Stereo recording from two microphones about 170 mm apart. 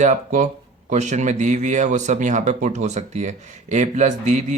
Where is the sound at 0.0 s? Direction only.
45° right (ahead or behind).